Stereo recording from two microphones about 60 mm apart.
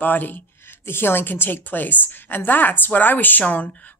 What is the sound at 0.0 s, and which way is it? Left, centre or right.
A woman's voice, left.